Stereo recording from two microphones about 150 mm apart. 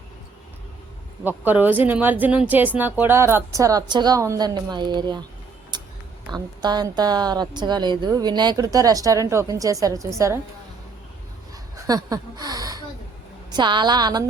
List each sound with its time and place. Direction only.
1.2 s speech: 10° right (ahead or behind); by 5.2 s 30° right (ahead or behind)
5.7 s a sound: 30° right (ahead or behind)
6.2 s a woman's voice: 30° right (ahead or behind)
11.9 s snort: 25° right (ahead or behind)
13.5 s a woman's voice: 30° right (ahead or behind)